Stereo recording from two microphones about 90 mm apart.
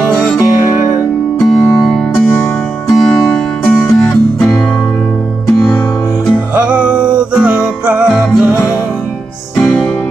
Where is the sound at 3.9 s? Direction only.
5° left (ahead or behind).